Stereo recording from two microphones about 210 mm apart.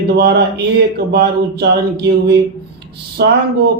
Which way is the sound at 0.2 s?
50° right (ahead or behind).